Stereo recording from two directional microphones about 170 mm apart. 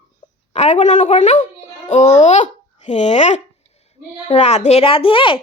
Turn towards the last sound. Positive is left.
turn(degrees=30)  # may be behind; listen again after turning